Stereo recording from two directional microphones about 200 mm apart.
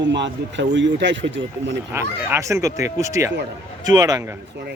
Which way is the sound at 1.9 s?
10° right (ahead or behind).